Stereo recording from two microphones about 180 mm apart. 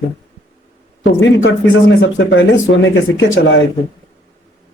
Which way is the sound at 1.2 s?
90° left.